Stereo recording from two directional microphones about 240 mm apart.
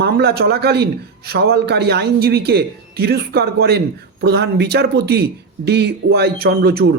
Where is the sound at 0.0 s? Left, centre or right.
Right.